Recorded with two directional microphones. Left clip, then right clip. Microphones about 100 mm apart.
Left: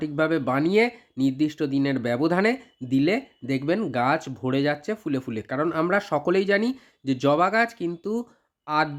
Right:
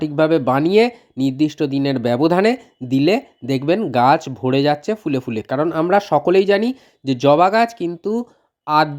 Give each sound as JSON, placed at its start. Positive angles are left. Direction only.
{"t": 0.0, "sound": "speech", "side_deg": -40}
{"t": 8.6, "sound": "speech", "side_deg": -45}